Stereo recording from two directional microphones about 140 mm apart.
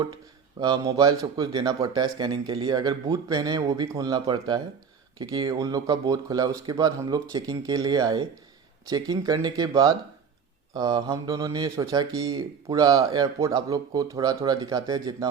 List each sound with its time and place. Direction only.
0.6 s speech: 25° right (ahead or behind)